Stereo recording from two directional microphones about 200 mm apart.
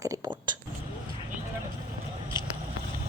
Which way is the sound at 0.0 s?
15° right (ahead or behind).